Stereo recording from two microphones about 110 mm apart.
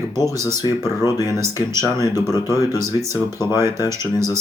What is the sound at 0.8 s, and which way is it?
Speech, 35° left (ahead or behind).